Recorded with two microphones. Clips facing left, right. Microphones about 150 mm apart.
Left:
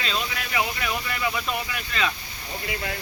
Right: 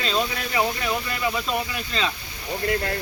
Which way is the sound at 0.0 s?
40° right (ahead or behind).